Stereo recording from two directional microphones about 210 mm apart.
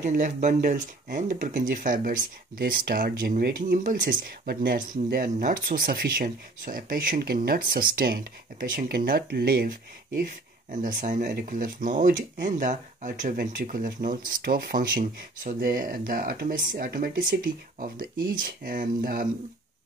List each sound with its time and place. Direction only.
0.0 s speech: 40° right (ahead or behind)